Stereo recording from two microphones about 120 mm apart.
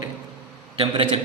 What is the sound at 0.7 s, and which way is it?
Speech, 45° right (ahead or behind).